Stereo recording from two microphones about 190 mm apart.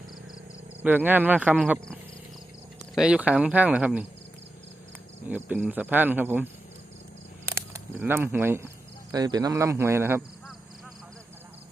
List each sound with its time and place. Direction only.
0.8 s speech: 10° right (ahead or behind)
5.3 s speech: 10° right (ahead or behind)
7.5 s speech: 15° right (ahead or behind)